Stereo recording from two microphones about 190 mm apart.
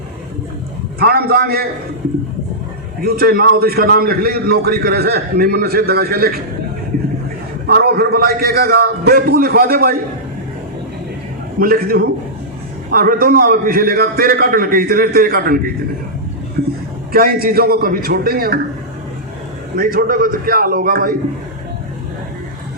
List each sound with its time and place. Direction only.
0.9 s a man's voice: 55° right (ahead or behind)
3.0 s a man's voice: 50° right (ahead or behind)
7.7 s a man's voice: 55° right (ahead or behind)
11.6 s a man's voice: 50° right (ahead or behind)
17.1 s a man's voice: 50° right (ahead or behind)
19.7 s a man's voice: 50° right (ahead or behind)